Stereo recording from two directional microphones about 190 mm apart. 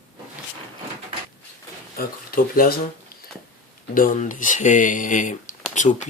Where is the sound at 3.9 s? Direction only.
45° left (ahead or behind).